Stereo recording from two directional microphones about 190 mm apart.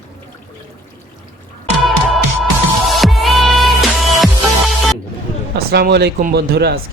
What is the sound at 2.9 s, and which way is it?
Music, centre (ahead or behind).